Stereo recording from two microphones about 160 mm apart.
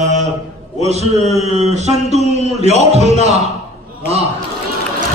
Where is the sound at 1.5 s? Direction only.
45° right (ahead or behind).